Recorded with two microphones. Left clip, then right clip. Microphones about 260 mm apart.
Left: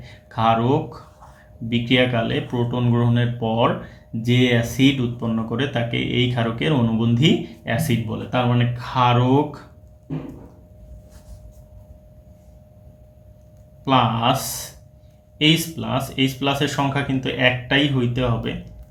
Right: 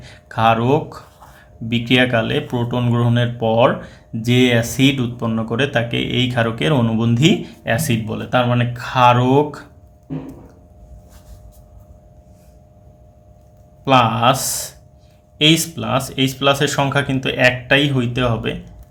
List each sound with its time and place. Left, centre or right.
0.0 s speech: right
13.8 s speech: right